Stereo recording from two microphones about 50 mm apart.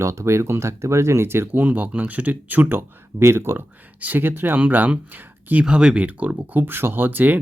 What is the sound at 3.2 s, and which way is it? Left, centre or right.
Speech, right.